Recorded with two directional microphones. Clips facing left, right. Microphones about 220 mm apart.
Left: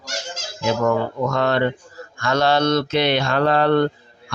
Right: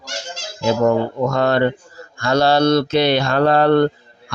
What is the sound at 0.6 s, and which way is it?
Mantra, 30° right (ahead or behind).